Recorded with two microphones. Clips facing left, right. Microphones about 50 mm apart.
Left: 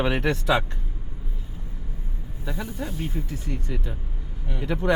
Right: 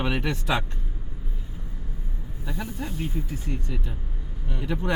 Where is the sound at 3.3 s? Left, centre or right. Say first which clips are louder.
Left 1 dB; left.